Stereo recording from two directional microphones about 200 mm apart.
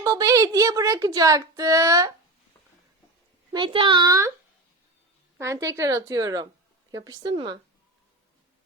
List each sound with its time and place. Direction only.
0.0 s a woman's voice: 15° right (ahead or behind)
3.5 s a woman's voice: 25° right (ahead or behind)
5.4 s a woman's voice: 15° right (ahead or behind)